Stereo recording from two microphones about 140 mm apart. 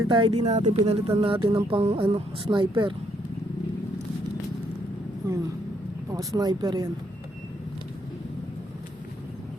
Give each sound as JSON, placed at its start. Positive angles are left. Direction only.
{"t": 0.1, "sound": "speech", "side_deg": -40}
{"t": 0.4, "sound": "speech", "side_deg": -50}
{"t": 5.2, "sound": "speech", "side_deg": -25}